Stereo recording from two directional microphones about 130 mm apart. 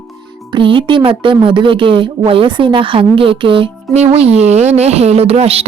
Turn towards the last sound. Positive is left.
turn(degrees=-50)  # may be behind; listen again after turning